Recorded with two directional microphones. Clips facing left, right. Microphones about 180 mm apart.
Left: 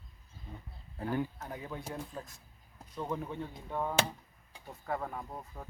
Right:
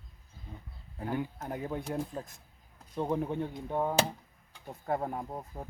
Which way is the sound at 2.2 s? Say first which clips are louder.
Right 4 dB; 30° right (ahead or behind).